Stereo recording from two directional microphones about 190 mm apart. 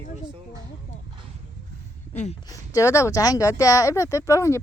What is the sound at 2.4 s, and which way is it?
Speech, 20° left (ahead or behind).